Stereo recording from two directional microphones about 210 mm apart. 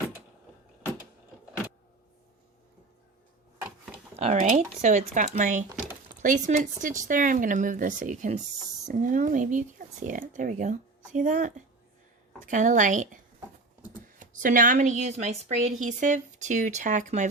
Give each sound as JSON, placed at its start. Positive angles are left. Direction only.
{"t": 4.2, "sound": "speech", "side_deg": -35}